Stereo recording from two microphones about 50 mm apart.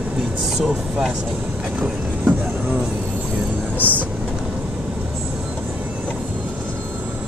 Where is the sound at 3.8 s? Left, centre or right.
Left.